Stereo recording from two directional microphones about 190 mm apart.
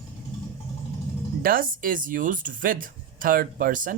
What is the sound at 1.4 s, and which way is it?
Speech, 50° right (ahead or behind).